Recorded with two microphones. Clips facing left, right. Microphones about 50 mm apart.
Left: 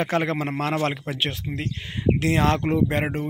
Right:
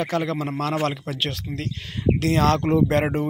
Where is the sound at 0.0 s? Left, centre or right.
Left.